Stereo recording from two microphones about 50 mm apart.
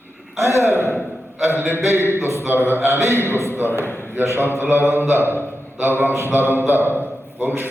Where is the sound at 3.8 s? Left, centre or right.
Left.